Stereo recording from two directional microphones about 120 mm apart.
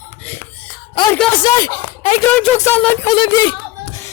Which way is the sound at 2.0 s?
65° left (ahead or behind).